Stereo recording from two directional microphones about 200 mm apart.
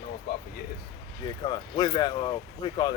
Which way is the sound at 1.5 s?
20° left (ahead or behind).